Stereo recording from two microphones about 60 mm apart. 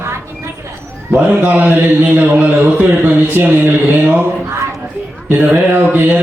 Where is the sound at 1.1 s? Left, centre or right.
Right.